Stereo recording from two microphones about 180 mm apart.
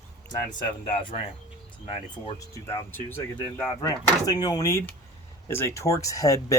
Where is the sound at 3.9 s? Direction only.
20° left (ahead or behind).